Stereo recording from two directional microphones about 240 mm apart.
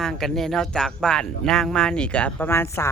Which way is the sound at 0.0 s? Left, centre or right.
Centre.